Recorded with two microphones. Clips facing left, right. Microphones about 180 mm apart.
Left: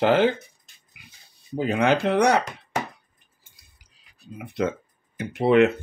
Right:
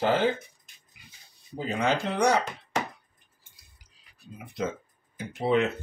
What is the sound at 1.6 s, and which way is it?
Speech, 65° left (ahead or behind).